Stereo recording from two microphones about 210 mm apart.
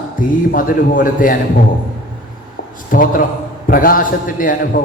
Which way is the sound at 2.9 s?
40° left (ahead or behind).